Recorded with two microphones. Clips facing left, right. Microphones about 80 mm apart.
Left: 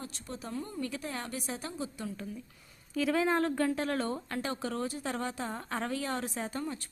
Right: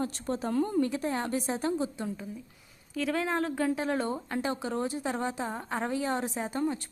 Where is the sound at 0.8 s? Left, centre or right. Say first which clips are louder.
Right 8 dB; right.